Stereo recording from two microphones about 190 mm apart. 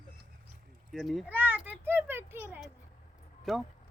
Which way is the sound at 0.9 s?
Centre (ahead or behind).